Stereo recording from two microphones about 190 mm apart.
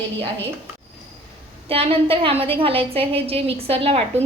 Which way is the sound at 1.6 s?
30° right (ahead or behind).